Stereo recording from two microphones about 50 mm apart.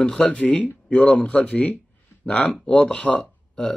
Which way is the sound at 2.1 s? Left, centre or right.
Left.